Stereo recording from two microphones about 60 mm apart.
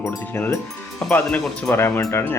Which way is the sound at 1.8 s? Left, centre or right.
Left.